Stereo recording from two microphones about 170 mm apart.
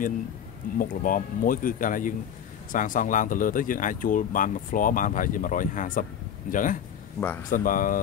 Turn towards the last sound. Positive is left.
turn(degrees=50)  # may be behind; listen again after turning